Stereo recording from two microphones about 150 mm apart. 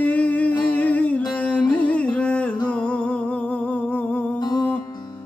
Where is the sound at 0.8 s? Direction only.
10° left (ahead or behind).